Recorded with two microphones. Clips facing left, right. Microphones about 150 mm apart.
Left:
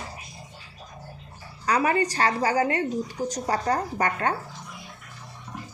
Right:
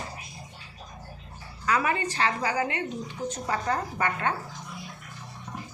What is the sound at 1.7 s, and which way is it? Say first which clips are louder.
A woman's voice: left 4 dB; 35° left (ahead or behind).